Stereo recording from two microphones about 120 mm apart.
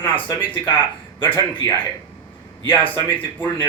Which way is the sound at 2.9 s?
15° left (ahead or behind).